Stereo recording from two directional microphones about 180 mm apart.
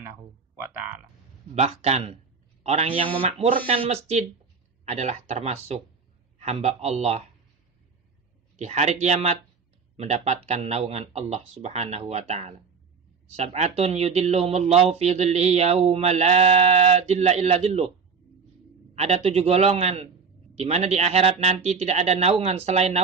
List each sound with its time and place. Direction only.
0.0 s music: 10° right (ahead or behind)
1.5 s speech: 35° right (ahead or behind)
8.5 s speech: 40° right (ahead or behind)
18.9 s speech: 35° right (ahead or behind)